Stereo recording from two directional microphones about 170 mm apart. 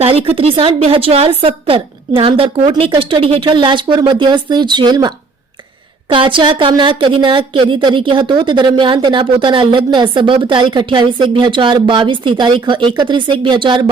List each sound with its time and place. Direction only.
0.0 s a woman's voice: 35° right (ahead or behind)